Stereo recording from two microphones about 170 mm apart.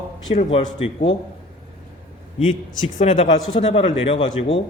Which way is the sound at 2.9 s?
45° left (ahead or behind).